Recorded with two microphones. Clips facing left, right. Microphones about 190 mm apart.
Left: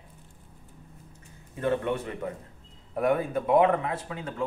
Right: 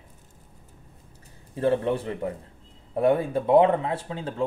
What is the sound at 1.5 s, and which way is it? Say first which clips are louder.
A man's voice: right 4 dB; 30° right (ahead or behind).